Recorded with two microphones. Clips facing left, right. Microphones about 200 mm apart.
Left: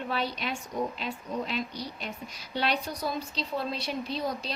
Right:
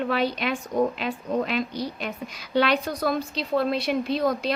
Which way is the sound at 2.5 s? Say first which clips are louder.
Right 8 dB; 90° right.